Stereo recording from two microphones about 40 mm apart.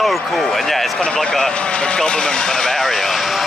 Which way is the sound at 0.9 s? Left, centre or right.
Left.